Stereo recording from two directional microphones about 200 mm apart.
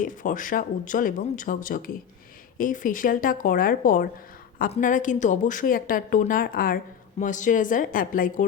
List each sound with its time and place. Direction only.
0.0 s a woman's voice: 40° left (ahead or behind)